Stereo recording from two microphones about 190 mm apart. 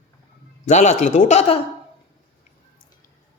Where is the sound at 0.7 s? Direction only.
40° left (ahead or behind).